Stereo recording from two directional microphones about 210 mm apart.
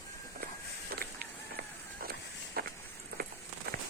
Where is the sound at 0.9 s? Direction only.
45° right (ahead or behind).